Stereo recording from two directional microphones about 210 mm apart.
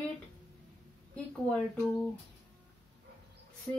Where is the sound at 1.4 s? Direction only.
5° left (ahead or behind).